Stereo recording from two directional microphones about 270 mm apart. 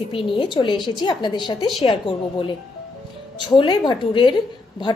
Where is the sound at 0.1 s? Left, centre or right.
Centre.